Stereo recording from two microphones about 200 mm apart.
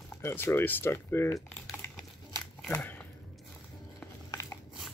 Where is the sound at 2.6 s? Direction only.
10° left (ahead or behind).